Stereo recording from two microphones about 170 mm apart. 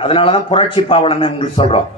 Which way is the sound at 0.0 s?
30° left (ahead or behind).